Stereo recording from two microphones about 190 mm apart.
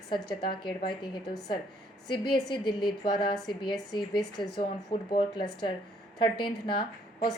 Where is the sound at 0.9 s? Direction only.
20° left (ahead or behind).